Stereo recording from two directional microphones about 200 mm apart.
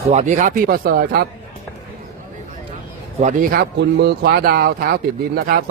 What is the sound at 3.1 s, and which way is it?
Speech, 40° right (ahead or behind).